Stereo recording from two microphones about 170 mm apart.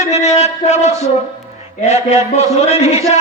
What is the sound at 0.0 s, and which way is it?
A man's voice, 40° left (ahead or behind).